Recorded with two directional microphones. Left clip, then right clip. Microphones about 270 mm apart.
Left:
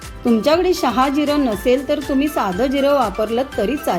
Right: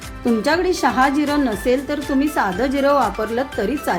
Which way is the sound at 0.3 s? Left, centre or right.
Centre.